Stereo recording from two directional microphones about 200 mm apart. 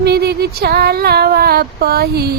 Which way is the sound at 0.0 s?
55° right (ahead or behind).